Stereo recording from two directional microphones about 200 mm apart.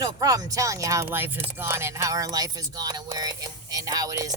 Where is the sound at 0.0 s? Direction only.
20° right (ahead or behind).